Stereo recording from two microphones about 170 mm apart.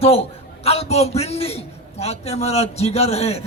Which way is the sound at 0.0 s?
35° left (ahead or behind).